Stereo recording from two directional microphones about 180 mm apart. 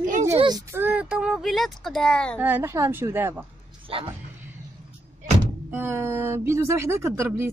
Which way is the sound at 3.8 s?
30° right (ahead or behind).